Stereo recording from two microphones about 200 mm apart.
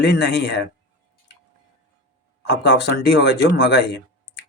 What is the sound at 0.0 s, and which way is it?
Speech, 60° left (ahead or behind).